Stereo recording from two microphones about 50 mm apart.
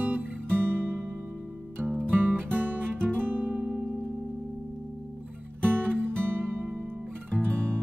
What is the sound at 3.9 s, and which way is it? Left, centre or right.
Music, left.